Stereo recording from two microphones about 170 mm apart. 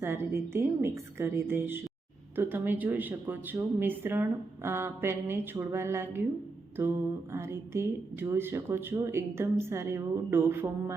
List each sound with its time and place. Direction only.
0.0 s speech: 15° right (ahead or behind)
7.3 s speech: 15° right (ahead or behind)